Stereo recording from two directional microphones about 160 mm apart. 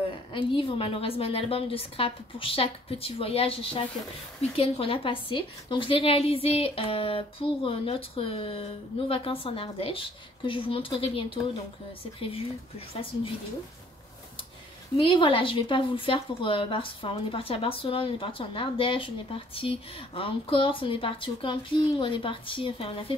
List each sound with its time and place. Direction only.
0.3 s speech: 30° left (ahead or behind)
15.0 s speech: 35° left (ahead or behind)